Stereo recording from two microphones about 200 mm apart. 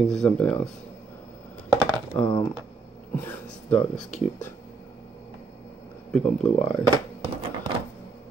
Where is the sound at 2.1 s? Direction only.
15° left (ahead or behind).